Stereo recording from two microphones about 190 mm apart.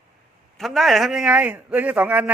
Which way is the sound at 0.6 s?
Centre (ahead or behind).